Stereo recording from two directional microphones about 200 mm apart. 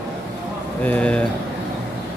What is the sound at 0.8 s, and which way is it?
Speech, 5° left (ahead or behind).